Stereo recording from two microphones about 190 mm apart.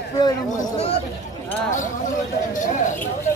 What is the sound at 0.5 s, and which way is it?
Speech, 30° left (ahead or behind).